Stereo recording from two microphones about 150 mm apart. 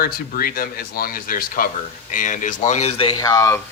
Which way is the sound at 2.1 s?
60° left (ahead or behind).